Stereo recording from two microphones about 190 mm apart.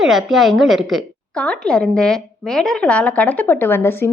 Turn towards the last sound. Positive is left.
turn(degrees=10)  # may be behind; listen again after turning